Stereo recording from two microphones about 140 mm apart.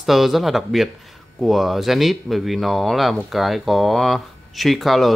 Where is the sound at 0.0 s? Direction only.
Centre (ahead or behind).